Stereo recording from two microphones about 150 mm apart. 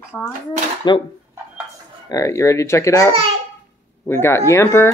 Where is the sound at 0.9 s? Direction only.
30° left (ahead or behind).